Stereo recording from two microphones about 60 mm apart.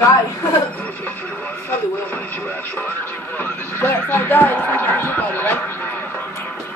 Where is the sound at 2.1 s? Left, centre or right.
Left.